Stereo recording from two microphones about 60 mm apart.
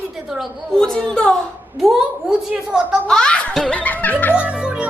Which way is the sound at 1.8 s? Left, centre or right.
Centre.